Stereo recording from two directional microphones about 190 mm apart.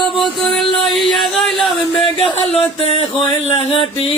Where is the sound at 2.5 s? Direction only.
30° left (ahead or behind).